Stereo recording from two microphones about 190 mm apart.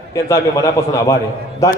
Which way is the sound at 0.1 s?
15° left (ahead or behind).